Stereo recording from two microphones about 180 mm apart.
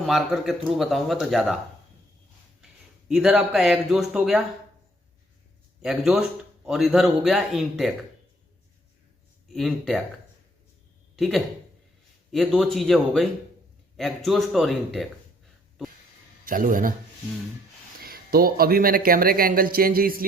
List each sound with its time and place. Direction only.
0.0 s speech: centre (ahead or behind)
3.1 s speech: centre (ahead or behind)
6.7 s speech: centre (ahead or behind)
9.5 s speech: centre (ahead or behind)
11.2 s speech: centre (ahead or behind)
16.5 s a man's voice: 50° right (ahead or behind)
18.0 s speech: 55° right (ahead or behind)